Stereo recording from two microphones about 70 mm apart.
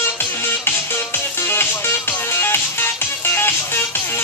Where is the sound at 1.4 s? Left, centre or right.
Left.